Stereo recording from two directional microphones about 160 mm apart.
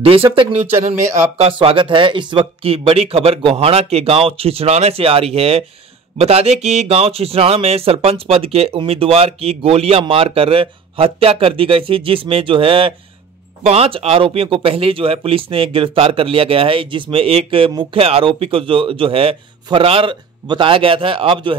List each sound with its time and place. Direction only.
0.0 s speech: 35° right (ahead or behind)